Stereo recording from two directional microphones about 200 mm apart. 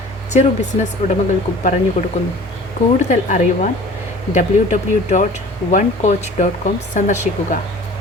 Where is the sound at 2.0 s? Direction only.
40° left (ahead or behind).